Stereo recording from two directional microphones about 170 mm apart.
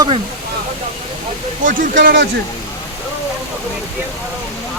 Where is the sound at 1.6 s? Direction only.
50° right (ahead or behind).